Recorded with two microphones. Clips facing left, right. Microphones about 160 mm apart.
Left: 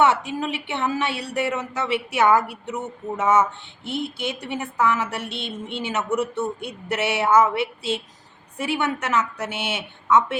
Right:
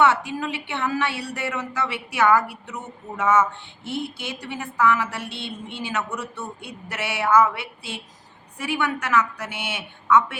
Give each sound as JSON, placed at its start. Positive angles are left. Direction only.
{"t": 0.0, "sound": "a woman's voice", "side_deg": 20}